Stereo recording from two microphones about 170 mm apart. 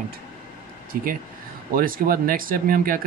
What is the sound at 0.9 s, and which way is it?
Speech, 55° right (ahead or behind).